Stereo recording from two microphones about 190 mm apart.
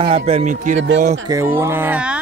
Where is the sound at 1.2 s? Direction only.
15° right (ahead or behind).